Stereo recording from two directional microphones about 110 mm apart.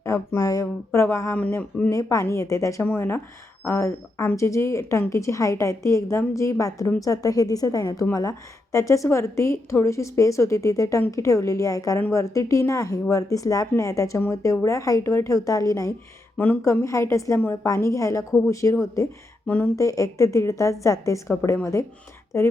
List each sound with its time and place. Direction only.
0.0 s a woman's voice: 25° left (ahead or behind)
1.3 s speech: 15° left (ahead or behind)
1.9 s a woman's voice: 30° left (ahead or behind)
19.5 s speech: 15° left (ahead or behind)
19.7 s a woman's voice: 30° left (ahead or behind)